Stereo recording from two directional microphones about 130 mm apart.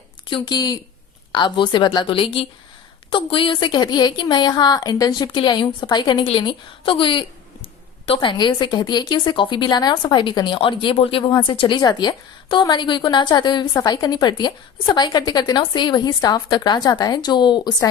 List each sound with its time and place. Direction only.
0.3 s a woman's voice: 35° left (ahead or behind)
11.3 s a woman's voice: 30° left (ahead or behind)
11.5 s a woman's voice: 45° left (ahead or behind)